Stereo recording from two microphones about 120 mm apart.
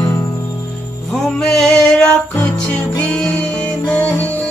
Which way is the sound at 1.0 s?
Centre (ahead or behind).